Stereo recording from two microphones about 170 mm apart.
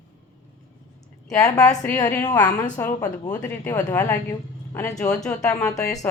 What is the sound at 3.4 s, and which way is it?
Speech, 10° left (ahead or behind).